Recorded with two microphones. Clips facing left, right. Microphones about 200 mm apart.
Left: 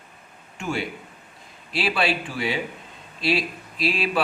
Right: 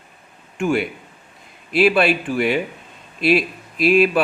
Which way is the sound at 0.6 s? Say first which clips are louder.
Right 8 dB; 55° right (ahead or behind).